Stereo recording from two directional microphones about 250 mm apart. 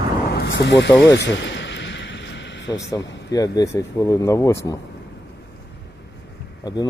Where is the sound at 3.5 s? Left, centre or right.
Centre.